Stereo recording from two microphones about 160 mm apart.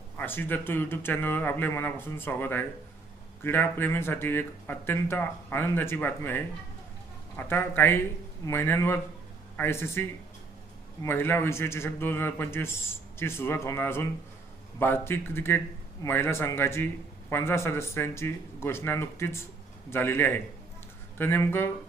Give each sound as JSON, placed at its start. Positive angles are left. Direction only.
{"t": 0.2, "sound": "a man's voice", "side_deg": 15}